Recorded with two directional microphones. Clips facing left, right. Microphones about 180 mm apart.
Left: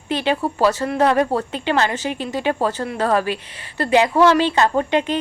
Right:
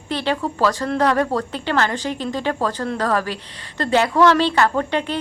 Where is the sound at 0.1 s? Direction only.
15° left (ahead or behind).